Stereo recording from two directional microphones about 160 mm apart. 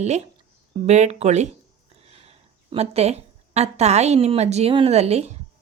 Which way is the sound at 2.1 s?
40° right (ahead or behind).